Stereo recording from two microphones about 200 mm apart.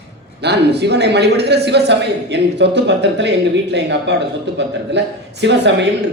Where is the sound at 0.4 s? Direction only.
55° right (ahead or behind).